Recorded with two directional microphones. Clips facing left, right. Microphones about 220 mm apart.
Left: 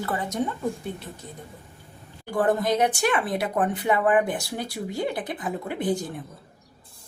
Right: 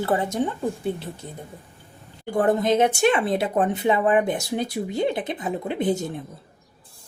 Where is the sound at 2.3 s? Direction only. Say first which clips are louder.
Right 3 dB; 20° right (ahead or behind).